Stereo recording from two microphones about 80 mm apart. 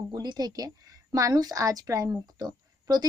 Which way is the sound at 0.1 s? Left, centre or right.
Right.